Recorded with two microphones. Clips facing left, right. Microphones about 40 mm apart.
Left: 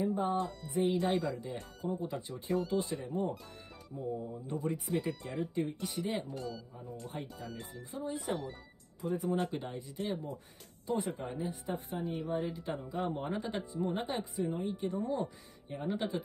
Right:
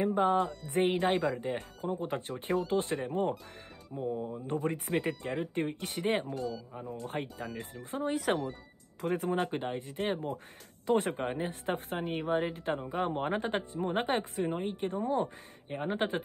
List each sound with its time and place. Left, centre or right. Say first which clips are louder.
0.0 s music: right 5 dB; right
0.7 s speech: right 1 dB; right
6.3 s speech: right 5 dB; centre
7.1 s a man's voice: right 5 dB; right
9.0 s a man's voice: right 3 dB; right
9.6 s speech: right 5 dB; right
10.9 s a man's voice: right 6 dB; right
12.5 s speech: right 5 dB; right